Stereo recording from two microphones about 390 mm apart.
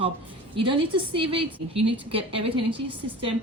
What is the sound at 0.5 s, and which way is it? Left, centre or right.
A woman's voice, centre.